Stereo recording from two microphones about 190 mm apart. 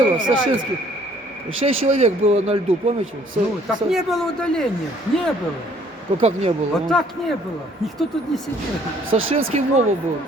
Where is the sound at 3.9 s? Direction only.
Centre (ahead or behind).